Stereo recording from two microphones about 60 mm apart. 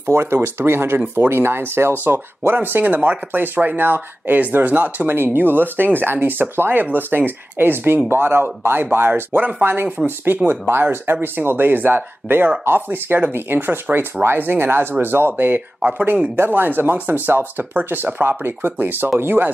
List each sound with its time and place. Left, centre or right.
0.1 s speech: right